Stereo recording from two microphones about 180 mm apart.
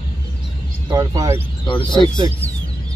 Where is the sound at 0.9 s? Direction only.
20° right (ahead or behind).